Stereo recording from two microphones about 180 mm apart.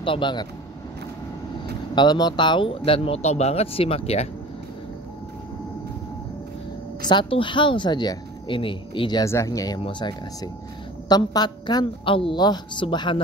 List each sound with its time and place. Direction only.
0.0 s speech: 25° left (ahead or behind)
2.0 s speech: 25° left (ahead or behind)
7.1 s speech: 25° left (ahead or behind)